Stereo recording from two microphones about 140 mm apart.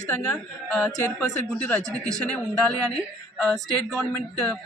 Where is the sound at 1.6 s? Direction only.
5° left (ahead or behind).